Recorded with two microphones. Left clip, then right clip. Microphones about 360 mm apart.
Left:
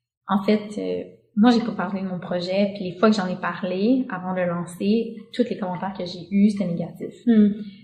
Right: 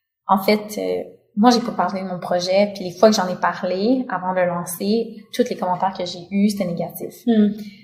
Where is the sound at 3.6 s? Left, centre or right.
Right.